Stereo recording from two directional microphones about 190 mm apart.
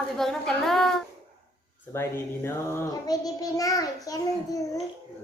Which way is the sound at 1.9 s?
10° left (ahead or behind).